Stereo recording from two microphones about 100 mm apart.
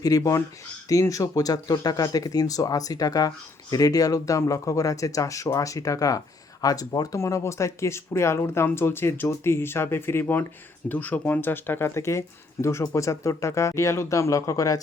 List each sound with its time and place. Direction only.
0.0 s speech: 35° left (ahead or behind)